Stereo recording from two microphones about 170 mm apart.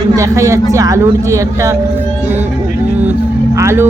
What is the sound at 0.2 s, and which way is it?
A woman's voice, 20° right (ahead or behind).